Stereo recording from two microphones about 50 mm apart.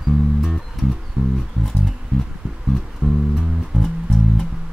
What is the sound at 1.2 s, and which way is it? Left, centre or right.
Music, centre.